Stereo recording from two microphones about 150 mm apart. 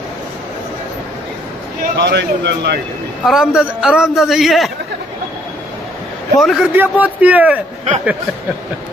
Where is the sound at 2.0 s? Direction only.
90° right.